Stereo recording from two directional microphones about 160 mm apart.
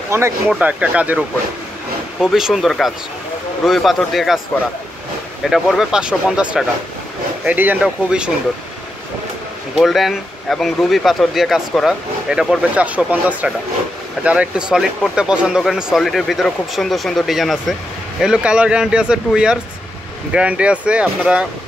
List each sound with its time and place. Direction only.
0.1 s speech: 15° right (ahead or behind); by 4.4 s centre (ahead or behind)
5.4 s speech: centre (ahead or behind)
9.8 s speech: centre (ahead or behind)